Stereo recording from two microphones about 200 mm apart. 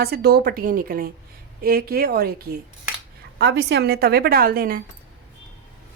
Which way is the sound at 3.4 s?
60° right (ahead or behind).